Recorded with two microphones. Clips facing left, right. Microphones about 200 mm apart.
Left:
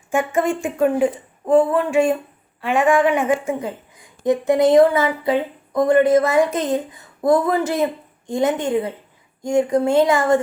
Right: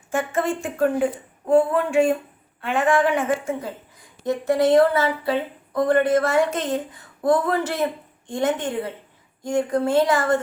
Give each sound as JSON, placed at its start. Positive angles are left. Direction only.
{"t": 0.1, "sound": "speech", "side_deg": 15}